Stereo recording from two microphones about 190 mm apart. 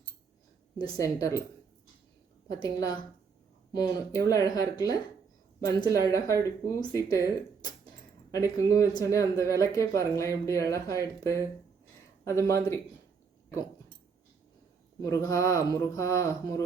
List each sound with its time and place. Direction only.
0.8 s speech: 20° left (ahead or behind)
2.5 s speech: 20° left (ahead or behind)
15.0 s speech: 15° left (ahead or behind)